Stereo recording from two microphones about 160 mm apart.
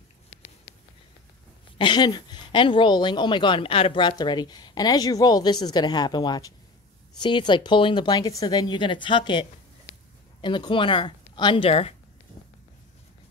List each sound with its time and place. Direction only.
1.8 s a woman's voice: 30° left (ahead or behind)